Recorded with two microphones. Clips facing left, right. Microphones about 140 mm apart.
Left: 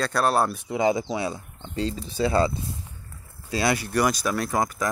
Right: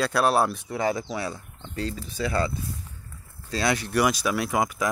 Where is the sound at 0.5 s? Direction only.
15° left (ahead or behind).